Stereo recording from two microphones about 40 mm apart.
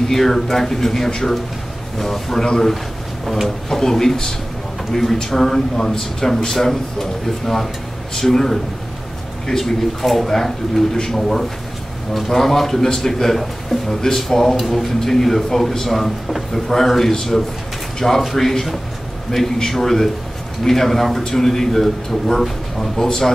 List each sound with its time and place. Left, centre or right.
0.1 s speech: centre
3.4 s speech: centre